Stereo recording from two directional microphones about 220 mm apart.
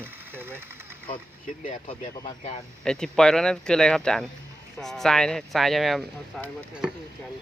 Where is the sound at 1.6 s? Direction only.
30° left (ahead or behind).